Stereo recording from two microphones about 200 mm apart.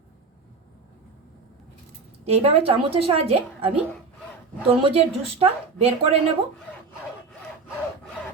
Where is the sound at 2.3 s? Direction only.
30° right (ahead or behind).